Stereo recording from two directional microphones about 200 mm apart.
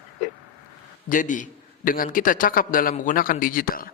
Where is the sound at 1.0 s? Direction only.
40° left (ahead or behind).